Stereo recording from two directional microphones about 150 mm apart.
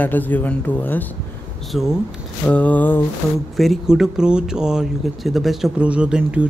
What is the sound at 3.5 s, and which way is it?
Speech, centre (ahead or behind).